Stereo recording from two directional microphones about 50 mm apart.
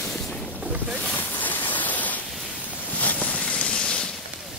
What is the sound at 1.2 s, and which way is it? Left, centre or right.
Waterfall, left.